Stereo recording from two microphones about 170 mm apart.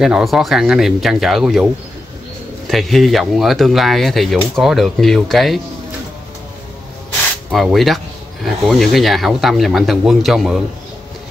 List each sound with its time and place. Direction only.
0.0 s speech: centre (ahead or behind)
2.7 s speech: centre (ahead or behind)
7.5 s speech: centre (ahead or behind)